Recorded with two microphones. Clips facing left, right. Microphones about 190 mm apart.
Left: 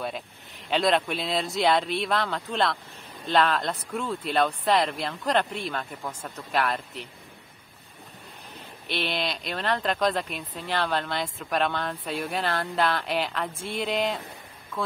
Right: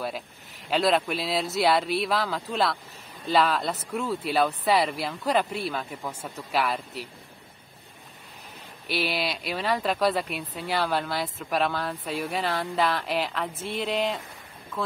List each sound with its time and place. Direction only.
0.7 s speech: centre (ahead or behind)
8.8 s speech: 5° right (ahead or behind)